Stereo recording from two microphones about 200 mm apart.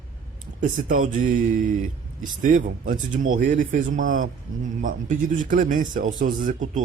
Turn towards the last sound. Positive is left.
turn(degrees=-40)  # may be behind; listen again after turning